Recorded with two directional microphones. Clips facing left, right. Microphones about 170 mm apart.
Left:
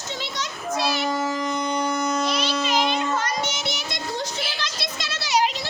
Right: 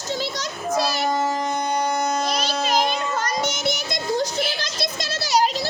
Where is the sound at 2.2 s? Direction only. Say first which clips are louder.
Even; 40° right (ahead or behind).